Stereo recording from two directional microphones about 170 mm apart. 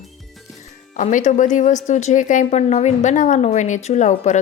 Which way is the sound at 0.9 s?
45° left (ahead or behind).